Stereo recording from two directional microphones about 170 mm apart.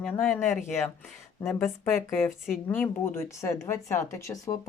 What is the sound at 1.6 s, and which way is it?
A woman's voice, centre (ahead or behind).